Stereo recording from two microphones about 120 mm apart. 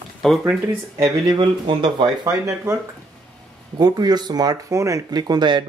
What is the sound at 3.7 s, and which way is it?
Speech, 35° right (ahead or behind).